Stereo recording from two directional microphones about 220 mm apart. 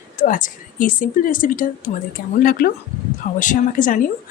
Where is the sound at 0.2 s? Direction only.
35° left (ahead or behind).